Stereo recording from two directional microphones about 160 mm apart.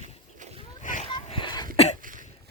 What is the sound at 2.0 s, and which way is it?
Cough, 55° right (ahead or behind).